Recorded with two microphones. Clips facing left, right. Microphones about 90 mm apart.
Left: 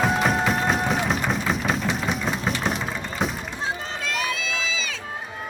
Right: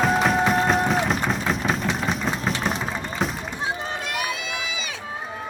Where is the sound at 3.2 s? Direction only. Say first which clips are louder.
Even; centre (ahead or behind).